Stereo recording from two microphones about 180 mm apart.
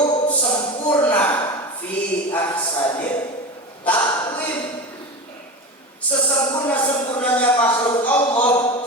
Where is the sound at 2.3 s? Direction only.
10° left (ahead or behind).